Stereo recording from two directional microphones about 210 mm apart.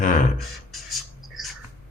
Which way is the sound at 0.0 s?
40° left (ahead or behind).